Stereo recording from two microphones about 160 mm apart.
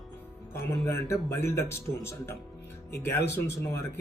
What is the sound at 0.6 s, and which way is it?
Speech, 15° left (ahead or behind).